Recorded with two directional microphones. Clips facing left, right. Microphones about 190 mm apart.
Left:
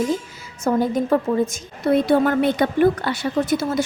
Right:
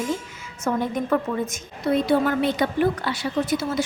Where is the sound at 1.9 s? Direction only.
55° left (ahead or behind).